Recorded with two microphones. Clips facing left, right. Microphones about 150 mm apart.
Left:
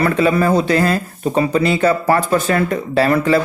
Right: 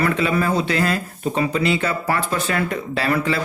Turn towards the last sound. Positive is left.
turn(degrees=40)  # may be behind; listen again after turning